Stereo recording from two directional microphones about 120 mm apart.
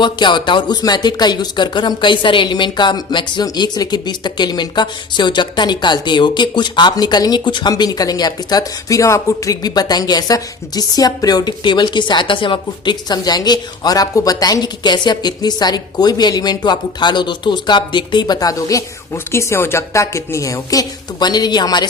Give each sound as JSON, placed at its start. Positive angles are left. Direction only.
{"t": 0.0, "sound": "a woman's voice", "side_deg": 40}